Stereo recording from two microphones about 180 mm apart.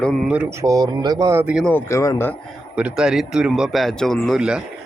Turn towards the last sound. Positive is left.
turn(degrees=-5)  # may be behind; listen again after turning